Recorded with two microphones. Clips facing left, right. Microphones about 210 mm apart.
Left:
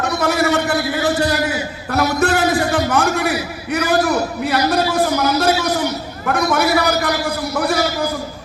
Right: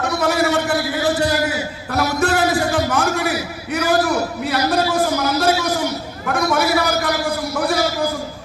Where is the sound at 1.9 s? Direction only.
60° left (ahead or behind).